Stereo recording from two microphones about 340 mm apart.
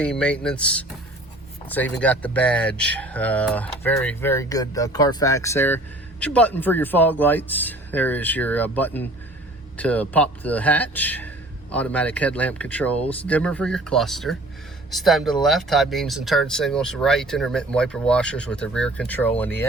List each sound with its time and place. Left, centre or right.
0.0 s speech: centre